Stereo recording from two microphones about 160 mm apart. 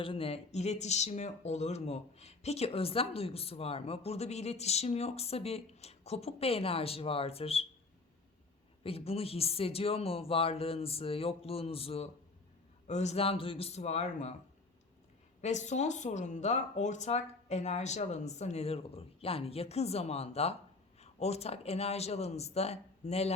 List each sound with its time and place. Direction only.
0.0 s speech: 35° left (ahead or behind)
8.8 s speech: 35° left (ahead or behind)
15.4 s speech: 45° left (ahead or behind)